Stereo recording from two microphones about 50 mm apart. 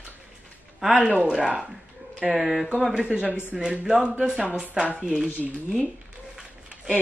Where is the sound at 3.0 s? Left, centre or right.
Right.